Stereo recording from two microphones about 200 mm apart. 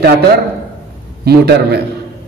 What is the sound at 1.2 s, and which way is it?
Speech, 55° right (ahead or behind).